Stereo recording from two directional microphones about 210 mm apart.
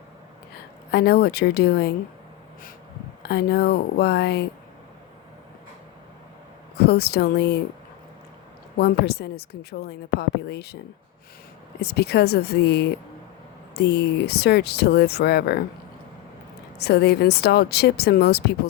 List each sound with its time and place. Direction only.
0.9 s speech: 50° left (ahead or behind)
3.2 s speech: 50° left (ahead or behind)
6.7 s speech: 50° left (ahead or behind)
8.8 s speech: 50° left (ahead or behind)
11.8 s speech: 50° left (ahead or behind)
16.7 s speech: 50° left (ahead or behind)